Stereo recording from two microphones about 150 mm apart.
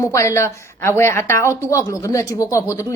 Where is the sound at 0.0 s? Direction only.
20° left (ahead or behind).